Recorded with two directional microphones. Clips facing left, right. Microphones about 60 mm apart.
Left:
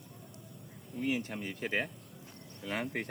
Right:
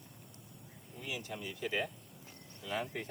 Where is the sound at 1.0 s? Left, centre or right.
Left.